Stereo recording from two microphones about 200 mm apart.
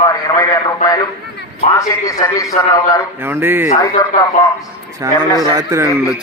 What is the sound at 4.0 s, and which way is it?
Speech, 15° left (ahead or behind).